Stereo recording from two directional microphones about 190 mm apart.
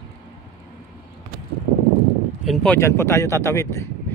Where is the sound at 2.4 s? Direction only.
5° left (ahead or behind).